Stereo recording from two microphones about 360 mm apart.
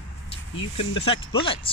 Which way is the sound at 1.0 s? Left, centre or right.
Centre.